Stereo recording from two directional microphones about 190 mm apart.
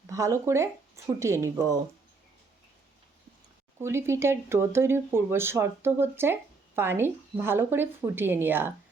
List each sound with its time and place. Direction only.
0.1 s speech: 15° right (ahead or behind)
3.8 s speech: 15° right (ahead or behind)